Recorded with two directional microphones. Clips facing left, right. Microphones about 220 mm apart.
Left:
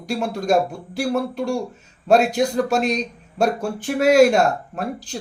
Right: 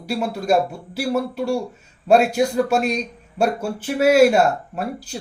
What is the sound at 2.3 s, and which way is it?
Speech, 5° right (ahead or behind).